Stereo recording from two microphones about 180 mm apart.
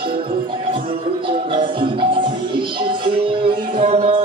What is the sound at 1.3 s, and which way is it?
Music, 30° right (ahead or behind).